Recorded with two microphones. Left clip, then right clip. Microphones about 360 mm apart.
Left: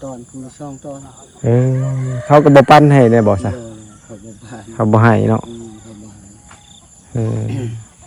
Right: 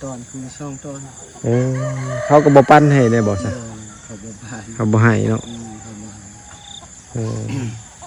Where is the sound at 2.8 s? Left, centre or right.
Centre.